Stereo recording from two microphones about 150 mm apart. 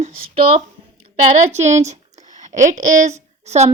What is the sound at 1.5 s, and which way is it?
A woman's voice, 50° right (ahead or behind).